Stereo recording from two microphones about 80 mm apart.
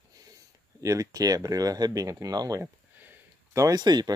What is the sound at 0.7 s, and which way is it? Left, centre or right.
Speech, right.